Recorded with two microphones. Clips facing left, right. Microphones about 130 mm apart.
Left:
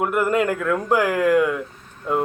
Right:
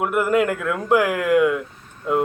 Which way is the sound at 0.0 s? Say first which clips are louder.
Right 1 dB; 5° right (ahead or behind).